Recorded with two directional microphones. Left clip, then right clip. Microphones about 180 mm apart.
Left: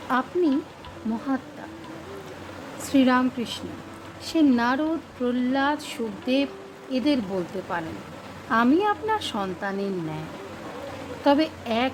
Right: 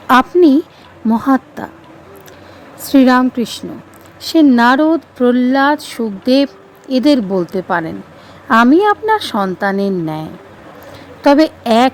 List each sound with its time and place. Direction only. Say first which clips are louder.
0.1 s a woman's voice: right 15 dB; 60° right (ahead or behind)
1.6 s a woman's voice: right 12 dB; 55° right (ahead or behind)
2.8 s a woman's voice: right 11 dB; 45° right (ahead or behind)
11.2 s a woman's voice: right 11 dB; 45° right (ahead or behind)